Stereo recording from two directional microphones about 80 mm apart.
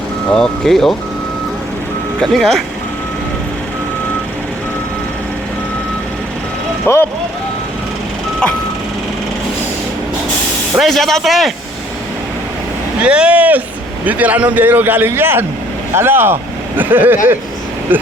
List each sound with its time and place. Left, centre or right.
0.3 s speech: centre
2.2 s speech: centre
6.8 s speech: left
10.8 s speech: centre
13.0 s speech: centre